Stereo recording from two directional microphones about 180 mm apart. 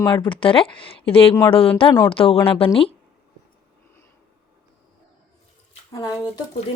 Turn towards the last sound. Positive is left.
turn(degrees=20)  # may be behind; listen again after turning